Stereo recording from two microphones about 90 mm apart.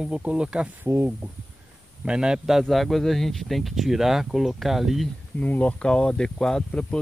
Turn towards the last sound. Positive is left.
turn(degrees=10)  # may be behind; listen again after turning